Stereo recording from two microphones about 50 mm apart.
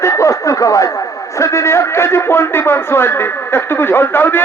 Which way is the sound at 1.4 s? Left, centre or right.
Left.